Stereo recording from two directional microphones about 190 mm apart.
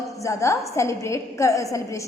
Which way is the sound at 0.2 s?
15° left (ahead or behind).